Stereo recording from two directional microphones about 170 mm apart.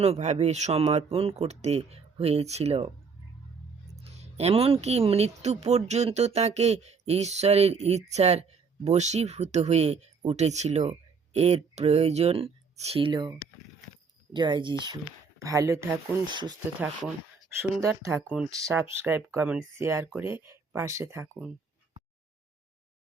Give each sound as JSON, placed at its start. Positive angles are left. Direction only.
{"t": 0.0, "sound": "speech", "side_deg": -40}
{"t": 4.0, "sound": "speech", "side_deg": -35}
{"t": 14.3, "sound": "speech", "side_deg": -25}
{"t": 17.8, "sound": "speech", "side_deg": -15}